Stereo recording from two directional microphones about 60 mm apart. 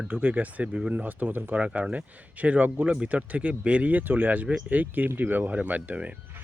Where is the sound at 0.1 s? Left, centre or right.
Right.